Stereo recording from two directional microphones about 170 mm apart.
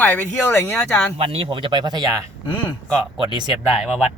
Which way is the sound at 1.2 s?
35° right (ahead or behind).